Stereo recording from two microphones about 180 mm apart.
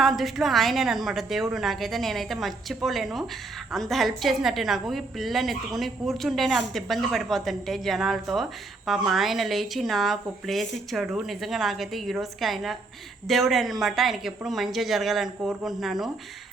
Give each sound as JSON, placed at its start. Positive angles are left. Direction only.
{"t": 0.0, "sound": "a woman's voice", "side_deg": 0}